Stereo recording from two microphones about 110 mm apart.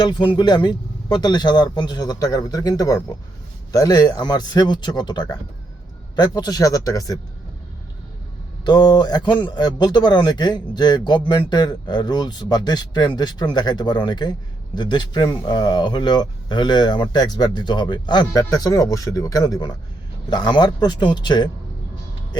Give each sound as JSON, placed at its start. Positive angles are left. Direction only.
{"t": 0.0, "sound": "a man's voice", "side_deg": 45}
{"t": 8.6, "sound": "a man's voice", "side_deg": 40}